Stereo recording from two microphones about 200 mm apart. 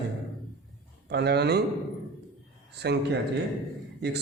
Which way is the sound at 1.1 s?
55° right (ahead or behind).